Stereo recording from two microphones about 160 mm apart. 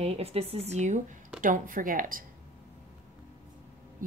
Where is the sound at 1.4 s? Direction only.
55° right (ahead or behind).